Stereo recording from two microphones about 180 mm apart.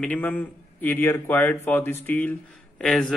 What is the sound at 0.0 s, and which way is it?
A man's voice, 10° left (ahead or behind).